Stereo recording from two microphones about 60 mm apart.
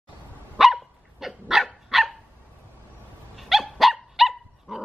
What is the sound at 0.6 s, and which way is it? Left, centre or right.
Dog, centre.